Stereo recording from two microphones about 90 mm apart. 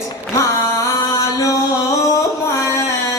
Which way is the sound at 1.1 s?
40° left (ahead or behind).